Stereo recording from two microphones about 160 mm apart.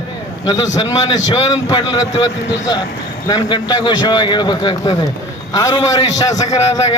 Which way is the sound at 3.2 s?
30° left (ahead or behind).